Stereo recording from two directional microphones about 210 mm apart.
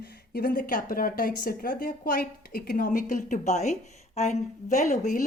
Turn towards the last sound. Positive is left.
turn(degrees=35)  # may be behind; listen again after turning